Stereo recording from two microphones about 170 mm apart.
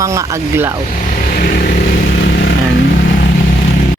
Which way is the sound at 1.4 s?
65° left (ahead or behind).